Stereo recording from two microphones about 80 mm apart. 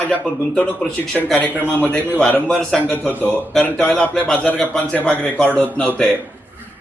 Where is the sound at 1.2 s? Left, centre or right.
Centre.